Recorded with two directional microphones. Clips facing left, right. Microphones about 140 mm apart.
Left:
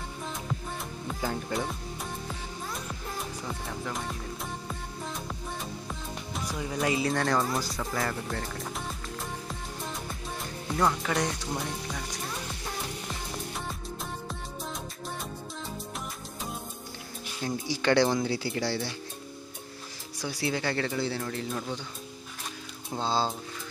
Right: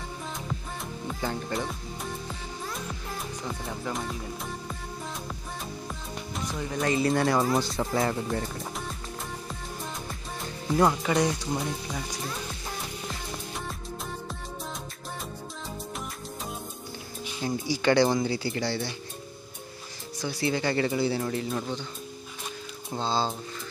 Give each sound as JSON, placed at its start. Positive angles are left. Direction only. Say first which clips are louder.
{"t": 1.0, "sound": "music", "louder": "right 1 dB", "side_deg": 0}
{"t": 5.3, "sound": "music", "louder": "left 1 dB", "side_deg": 0}
{"t": 7.2, "sound": "speech", "louder": "right 4 dB", "side_deg": -5}
{"t": 7.6, "sound": "speech", "louder": "right 5 dB", "side_deg": -25}
{"t": 8.5, "sound": "music", "louder": "right 1 dB", "side_deg": 0}
{"t": 11.0, "sound": "speech", "louder": "right 4 dB", "side_deg": -5}
{"t": 17.4, "sound": "speech", "louder": "right 2 dB", "side_deg": -5}
{"t": 20.2, "sound": "speech", "louder": "right 3 dB", "side_deg": 10}
{"t": 22.9, "sound": "speech", "louder": "even", "side_deg": 5}